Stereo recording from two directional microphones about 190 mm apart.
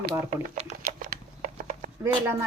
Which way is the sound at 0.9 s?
45° right (ahead or behind).